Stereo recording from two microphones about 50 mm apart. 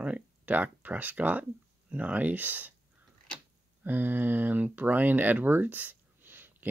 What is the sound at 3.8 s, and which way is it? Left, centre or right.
Speech, right.